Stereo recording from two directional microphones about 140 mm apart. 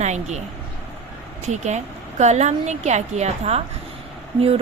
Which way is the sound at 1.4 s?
55° right (ahead or behind).